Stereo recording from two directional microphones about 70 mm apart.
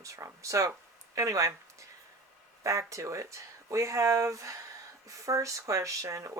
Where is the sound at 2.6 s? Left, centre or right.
Right.